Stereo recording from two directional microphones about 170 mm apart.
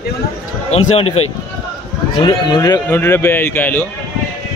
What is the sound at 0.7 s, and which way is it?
Speech, 40° left (ahead or behind).